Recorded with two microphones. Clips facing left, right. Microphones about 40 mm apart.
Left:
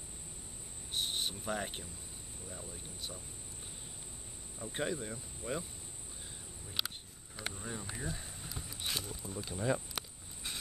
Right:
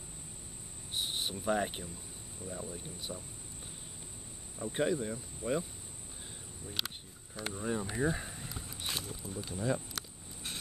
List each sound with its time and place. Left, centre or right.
0.9 s speech: centre
4.7 s speech: centre
6.8 s speech: centre
7.5 s speech: centre
8.4 s a sound: centre
9.3 s speech: centre